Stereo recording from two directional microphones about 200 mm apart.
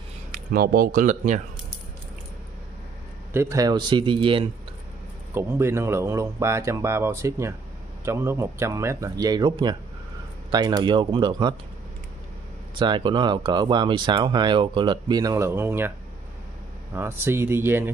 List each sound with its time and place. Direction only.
0.3 s speech: 50° right (ahead or behind)
3.3 s speech: 15° right (ahead or behind)
5.3 s speech: 10° right (ahead or behind)
12.7 s speech: 25° right (ahead or behind)
16.9 s speech: 10° right (ahead or behind)